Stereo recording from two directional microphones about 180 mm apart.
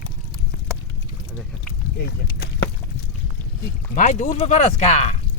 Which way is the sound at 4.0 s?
40° left (ahead or behind).